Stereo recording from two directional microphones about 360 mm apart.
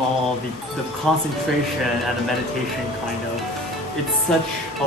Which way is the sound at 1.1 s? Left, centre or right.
Centre.